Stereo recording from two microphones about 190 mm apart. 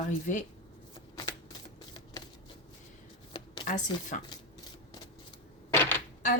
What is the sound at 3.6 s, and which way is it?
Speech, 40° left (ahead or behind).